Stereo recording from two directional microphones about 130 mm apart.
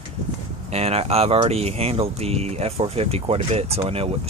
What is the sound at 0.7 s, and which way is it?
Speech, 55° right (ahead or behind).